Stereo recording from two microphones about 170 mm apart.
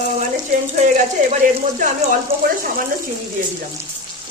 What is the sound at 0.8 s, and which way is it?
Speech, 45° right (ahead or behind).